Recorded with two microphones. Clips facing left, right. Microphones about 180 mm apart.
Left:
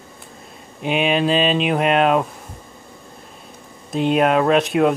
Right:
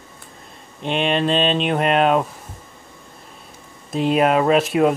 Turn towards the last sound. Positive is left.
turn(degrees=0)  # may be behind; listen again after turning